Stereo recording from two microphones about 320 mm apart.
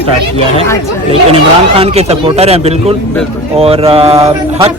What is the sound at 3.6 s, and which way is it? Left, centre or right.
Mantra, centre.